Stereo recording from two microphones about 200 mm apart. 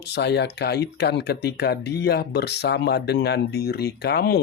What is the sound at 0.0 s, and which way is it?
Speech, 55° left (ahead or behind).